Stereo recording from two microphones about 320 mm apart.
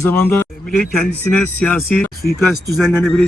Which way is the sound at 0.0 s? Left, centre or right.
Centre.